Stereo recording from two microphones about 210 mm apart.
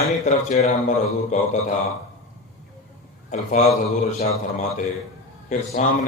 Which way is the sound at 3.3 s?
35° left (ahead or behind).